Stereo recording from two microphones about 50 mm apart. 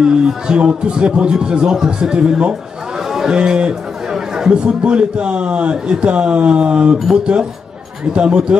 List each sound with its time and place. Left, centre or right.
0.0 s speech: centre
3.1 s a sound: centre
3.3 s a man's voice: right
8.1 s a man's voice: centre